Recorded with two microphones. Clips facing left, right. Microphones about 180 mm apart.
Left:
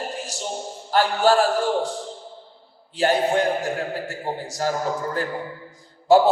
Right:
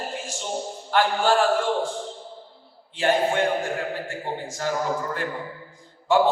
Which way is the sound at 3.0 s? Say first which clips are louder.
Left 2 dB; 40° left (ahead or behind).